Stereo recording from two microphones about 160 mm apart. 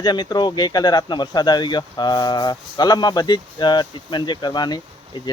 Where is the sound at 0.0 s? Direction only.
25° left (ahead or behind).